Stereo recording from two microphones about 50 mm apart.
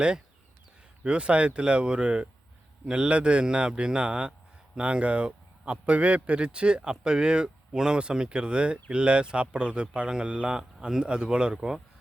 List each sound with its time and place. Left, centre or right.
1.0 s a man's voice: right